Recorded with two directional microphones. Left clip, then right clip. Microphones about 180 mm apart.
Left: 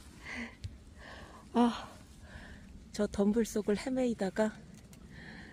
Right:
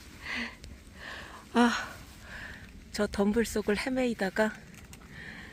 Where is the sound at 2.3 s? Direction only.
5° right (ahead or behind).